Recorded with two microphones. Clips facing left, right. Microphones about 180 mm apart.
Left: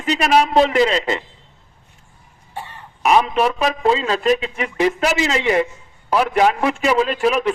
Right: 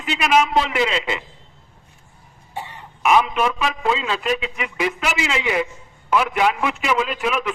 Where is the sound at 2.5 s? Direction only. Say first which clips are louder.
Even; 15° right (ahead or behind).